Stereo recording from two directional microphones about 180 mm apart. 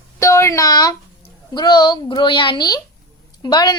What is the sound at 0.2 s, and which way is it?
Speech, 15° left (ahead or behind).